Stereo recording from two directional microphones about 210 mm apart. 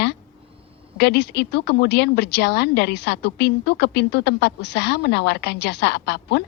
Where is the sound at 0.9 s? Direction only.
55° left (ahead or behind).